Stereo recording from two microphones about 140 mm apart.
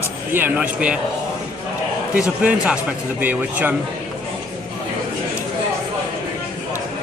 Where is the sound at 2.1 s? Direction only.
5° right (ahead or behind).